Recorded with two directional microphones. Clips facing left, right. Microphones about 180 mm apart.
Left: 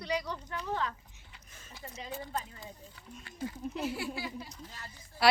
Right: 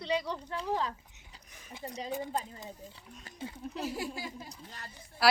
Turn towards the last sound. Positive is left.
turn(degrees=0)  # may be behind; listen again after turning